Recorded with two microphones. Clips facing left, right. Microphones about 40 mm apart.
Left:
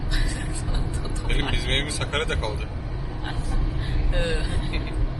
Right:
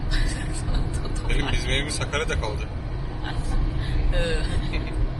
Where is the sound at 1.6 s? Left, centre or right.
Left.